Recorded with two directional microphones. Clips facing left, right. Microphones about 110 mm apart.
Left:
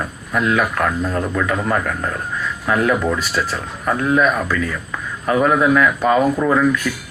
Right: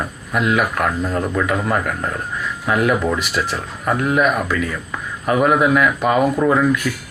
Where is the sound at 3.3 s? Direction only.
15° right (ahead or behind).